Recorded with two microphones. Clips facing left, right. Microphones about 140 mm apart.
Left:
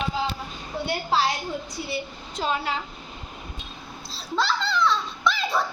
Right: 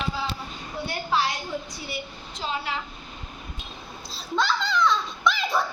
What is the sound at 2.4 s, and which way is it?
Speech, 55° left (ahead or behind).